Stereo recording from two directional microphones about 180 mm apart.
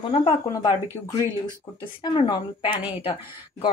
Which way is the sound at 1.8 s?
25° left (ahead or behind).